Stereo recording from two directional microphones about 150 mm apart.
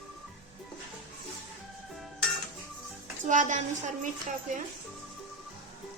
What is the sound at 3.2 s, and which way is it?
Speech, 55° right (ahead or behind).